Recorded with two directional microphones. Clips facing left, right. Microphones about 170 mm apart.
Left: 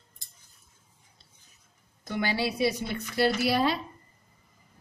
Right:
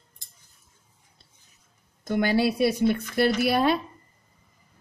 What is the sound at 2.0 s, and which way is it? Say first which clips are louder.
A woman's voice: right 7 dB; 50° right (ahead or behind).